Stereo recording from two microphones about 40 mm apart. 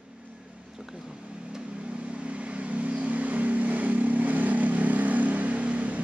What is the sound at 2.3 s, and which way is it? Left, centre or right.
Vehicle, right.